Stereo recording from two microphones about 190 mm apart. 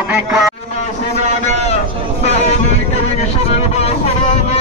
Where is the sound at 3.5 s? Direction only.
35° left (ahead or behind).